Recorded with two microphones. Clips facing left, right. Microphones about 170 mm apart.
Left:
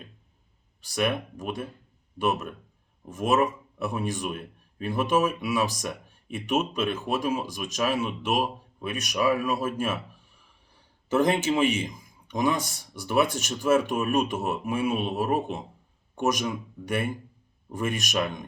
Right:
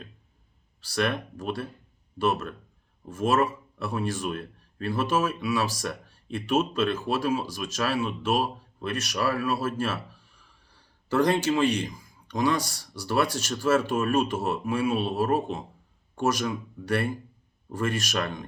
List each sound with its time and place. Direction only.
0.8 s a man's voice: 15° left (ahead or behind)